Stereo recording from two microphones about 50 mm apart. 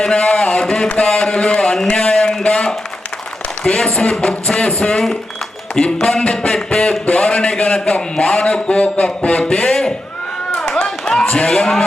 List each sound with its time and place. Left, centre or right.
0.0 s speech: left
3.6 s music: centre
7.0 s a man's voice: left
10.8 s a sound: centre
11.4 s music: centre